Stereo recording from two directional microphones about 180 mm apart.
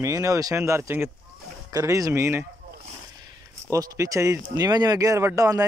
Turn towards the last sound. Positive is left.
turn(degrees=-20)  # may be behind; listen again after turning